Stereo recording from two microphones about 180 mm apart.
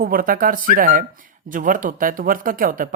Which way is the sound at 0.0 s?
55° right (ahead or behind).